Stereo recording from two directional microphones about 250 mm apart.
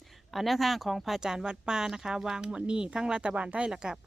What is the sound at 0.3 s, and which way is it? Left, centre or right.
Speech, centre.